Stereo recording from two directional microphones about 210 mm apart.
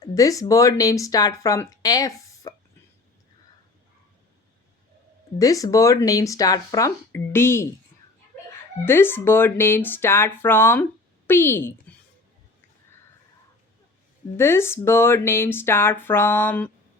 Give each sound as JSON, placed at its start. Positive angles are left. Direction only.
{"t": 0.0, "sound": "speech", "side_deg": 15}
{"t": 5.4, "sound": "speech", "side_deg": 15}
{"t": 8.8, "sound": "a woman's voice", "side_deg": 10}
{"t": 14.3, "sound": "speech", "side_deg": 10}